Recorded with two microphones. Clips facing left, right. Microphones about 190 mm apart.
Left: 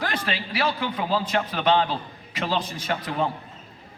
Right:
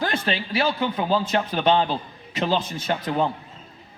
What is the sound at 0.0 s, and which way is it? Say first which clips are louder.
A man's voice: right 3 dB; 25° right (ahead or behind).